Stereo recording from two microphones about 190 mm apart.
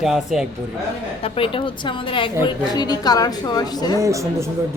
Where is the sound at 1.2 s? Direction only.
30° left (ahead or behind).